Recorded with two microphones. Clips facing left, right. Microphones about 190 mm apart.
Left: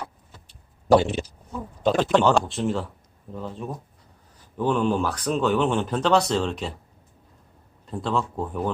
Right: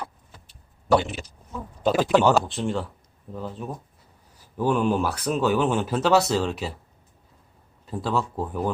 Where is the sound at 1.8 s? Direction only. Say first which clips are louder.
Even; 5° right (ahead or behind).